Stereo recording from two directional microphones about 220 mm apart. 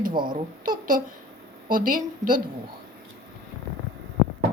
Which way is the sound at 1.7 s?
40° right (ahead or behind).